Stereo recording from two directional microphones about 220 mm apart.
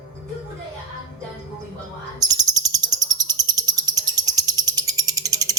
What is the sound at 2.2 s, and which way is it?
Bird, 15° right (ahead or behind).